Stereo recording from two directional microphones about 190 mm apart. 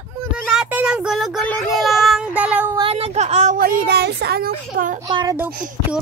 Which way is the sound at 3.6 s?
50° right (ahead or behind).